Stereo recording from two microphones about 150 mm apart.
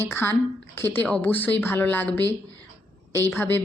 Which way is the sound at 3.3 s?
15° left (ahead or behind).